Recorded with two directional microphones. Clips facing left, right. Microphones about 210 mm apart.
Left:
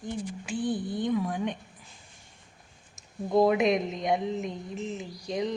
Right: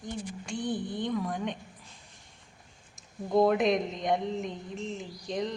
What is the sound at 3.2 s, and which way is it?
Speech, 5° left (ahead or behind).